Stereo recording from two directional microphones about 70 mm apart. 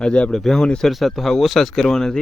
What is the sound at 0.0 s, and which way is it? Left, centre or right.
Speech, centre.